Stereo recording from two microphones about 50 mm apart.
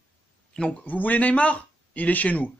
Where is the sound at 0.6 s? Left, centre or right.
Left.